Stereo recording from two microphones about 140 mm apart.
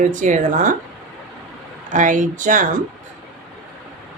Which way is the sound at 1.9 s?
65° right (ahead or behind).